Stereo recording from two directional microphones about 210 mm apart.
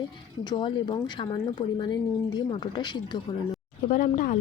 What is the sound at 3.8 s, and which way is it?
Speech, 35° left (ahead or behind).